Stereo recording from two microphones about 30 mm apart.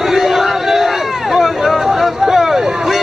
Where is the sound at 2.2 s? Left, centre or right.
Centre.